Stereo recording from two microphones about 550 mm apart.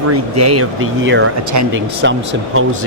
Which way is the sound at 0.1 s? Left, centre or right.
Right.